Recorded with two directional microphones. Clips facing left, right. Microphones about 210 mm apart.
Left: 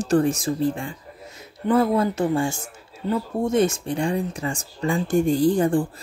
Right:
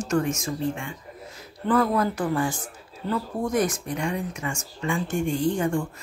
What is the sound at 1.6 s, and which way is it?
Speech, 25° left (ahead or behind).